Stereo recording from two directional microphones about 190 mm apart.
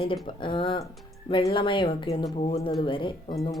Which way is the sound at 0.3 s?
25° left (ahead or behind).